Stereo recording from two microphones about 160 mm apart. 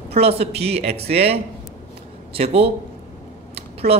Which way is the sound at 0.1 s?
40° right (ahead or behind).